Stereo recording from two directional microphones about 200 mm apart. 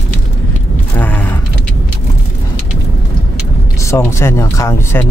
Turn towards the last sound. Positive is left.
turn(degrees=15)  # may be behind; listen again after turning